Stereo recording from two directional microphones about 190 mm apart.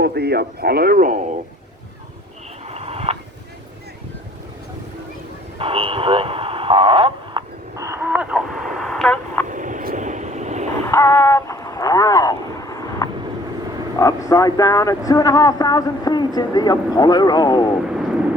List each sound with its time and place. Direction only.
0.0 s a man's voice: 60° right (ahead or behind)
2.6 s a sound: 35° right (ahead or behind)
5.5 s radio: 30° right (ahead or behind)
7.8 s a sound: 15° right (ahead or behind); by 9.5 s 5° left (ahead or behind)
9.5 s vehicle: 40° right (ahead or behind)
10.8 s vehicle: 15° left (ahead or behind)
14.0 s speech: 15° left (ahead or behind)
17.8 s vehicle: 5° right (ahead or behind)